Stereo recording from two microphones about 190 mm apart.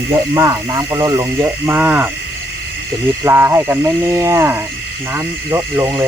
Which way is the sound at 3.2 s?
15° right (ahead or behind).